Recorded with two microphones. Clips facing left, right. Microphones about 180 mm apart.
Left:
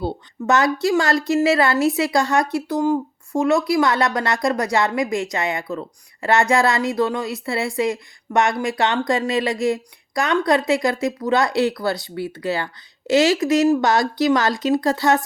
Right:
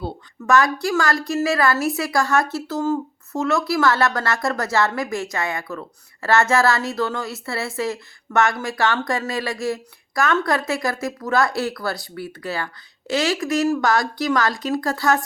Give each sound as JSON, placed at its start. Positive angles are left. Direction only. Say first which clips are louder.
{"t": 0.0, "sound": "speech", "louder": "left 5 dB", "side_deg": 20}